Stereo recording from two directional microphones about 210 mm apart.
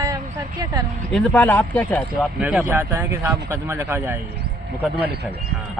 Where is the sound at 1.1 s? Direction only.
5° left (ahead or behind); by 4.2 s 10° right (ahead or behind).